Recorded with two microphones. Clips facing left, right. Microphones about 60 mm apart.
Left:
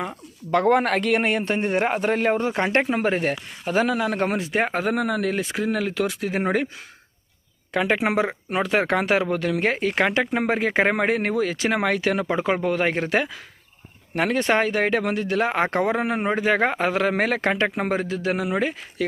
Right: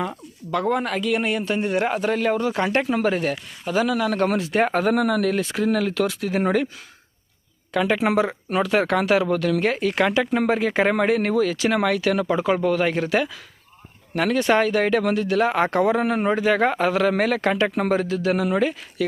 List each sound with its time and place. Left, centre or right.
0.5 s a man's voice: left
4.6 s speech: centre
7.7 s speech: left